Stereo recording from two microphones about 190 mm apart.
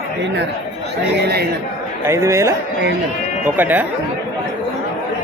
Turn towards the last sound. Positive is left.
turn(degrees=-10)  # may be behind; listen again after turning